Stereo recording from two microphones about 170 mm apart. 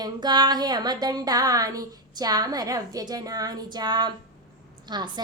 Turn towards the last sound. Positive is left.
turn(degrees=-25)  # may be behind; listen again after turning